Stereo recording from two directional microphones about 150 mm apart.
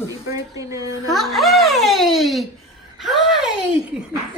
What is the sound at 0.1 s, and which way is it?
Speech, 20° right (ahead or behind).